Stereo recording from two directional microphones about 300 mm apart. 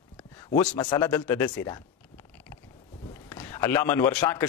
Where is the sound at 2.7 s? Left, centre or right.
Left.